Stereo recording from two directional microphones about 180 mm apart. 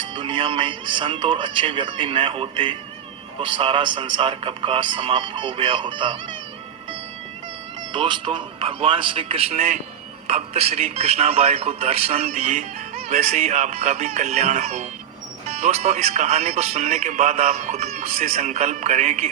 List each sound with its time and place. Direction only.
0.1 s speech: 30° right (ahead or behind)
7.9 s speech: 25° right (ahead or behind)